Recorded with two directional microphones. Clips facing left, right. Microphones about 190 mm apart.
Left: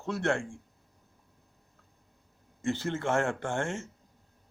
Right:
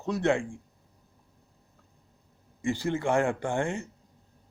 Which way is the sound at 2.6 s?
15° right (ahead or behind).